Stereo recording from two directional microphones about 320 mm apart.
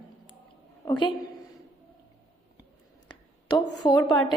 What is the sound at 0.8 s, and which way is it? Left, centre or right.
Speech, centre.